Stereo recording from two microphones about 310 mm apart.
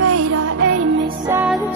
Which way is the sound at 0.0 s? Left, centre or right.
Right.